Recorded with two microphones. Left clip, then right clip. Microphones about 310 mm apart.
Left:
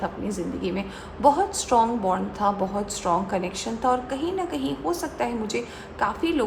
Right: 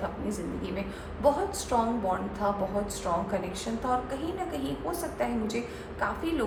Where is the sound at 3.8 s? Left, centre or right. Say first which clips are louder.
Left 7 dB; left.